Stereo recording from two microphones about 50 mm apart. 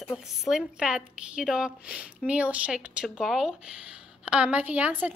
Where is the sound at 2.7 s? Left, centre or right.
Centre.